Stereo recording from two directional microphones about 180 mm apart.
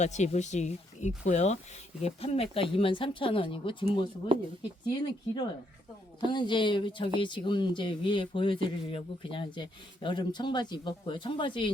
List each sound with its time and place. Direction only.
0.0 s speech: 40° left (ahead or behind)
4.9 s speech: 25° left (ahead or behind)